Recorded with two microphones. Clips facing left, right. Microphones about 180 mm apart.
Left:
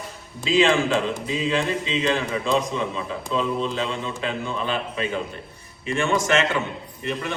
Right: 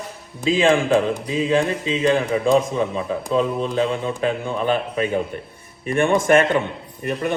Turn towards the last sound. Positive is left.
turn(degrees=-50)  # may be behind; listen again after turning